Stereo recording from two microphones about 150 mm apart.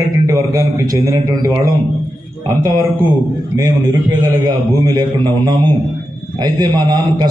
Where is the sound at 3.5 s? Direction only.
25° right (ahead or behind).